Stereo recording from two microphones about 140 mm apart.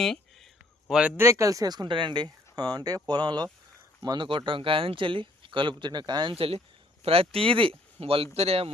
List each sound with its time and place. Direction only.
0.0 s a sound: 5° left (ahead or behind)
0.9 s speech: 5° right (ahead or behind)
1.1 s a man's voice: 20° right (ahead or behind); by 8.7 s 45° right (ahead or behind)